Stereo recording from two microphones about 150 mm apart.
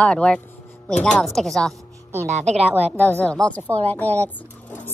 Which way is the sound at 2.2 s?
50° right (ahead or behind).